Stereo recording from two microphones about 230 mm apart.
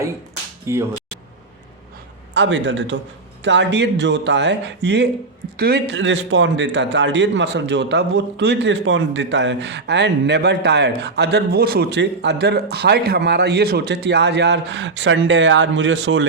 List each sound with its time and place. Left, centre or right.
0.7 s speech: centre
2.3 s a man's voice: right